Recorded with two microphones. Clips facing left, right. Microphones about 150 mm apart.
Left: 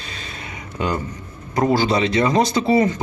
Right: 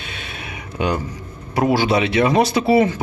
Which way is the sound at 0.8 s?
10° right (ahead or behind).